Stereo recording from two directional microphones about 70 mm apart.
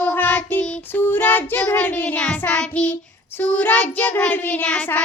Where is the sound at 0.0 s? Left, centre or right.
Left.